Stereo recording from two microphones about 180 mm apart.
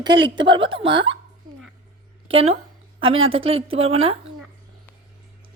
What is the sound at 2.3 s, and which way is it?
A woman's voice, 30° right (ahead or behind).